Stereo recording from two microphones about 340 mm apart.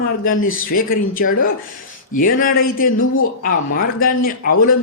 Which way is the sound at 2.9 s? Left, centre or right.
Left.